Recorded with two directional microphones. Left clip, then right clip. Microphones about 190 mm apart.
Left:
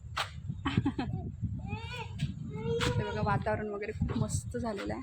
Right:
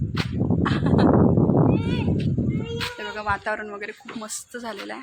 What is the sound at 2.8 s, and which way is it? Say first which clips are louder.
Speech: right 4 dB; 10° right (ahead or behind).